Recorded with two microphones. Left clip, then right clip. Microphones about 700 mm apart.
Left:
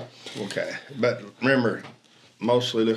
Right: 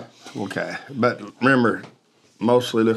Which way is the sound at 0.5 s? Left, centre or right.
Right.